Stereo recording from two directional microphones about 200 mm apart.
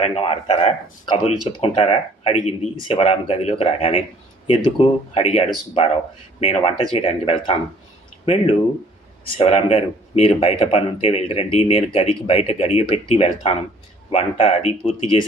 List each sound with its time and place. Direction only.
0.0 s a man's voice: 30° left (ahead or behind)